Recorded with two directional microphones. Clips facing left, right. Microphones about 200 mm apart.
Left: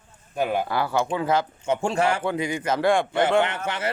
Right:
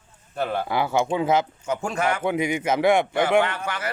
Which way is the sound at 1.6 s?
30° left (ahead or behind).